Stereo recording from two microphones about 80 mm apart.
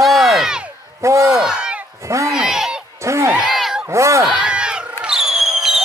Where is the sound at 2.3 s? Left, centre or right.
Centre.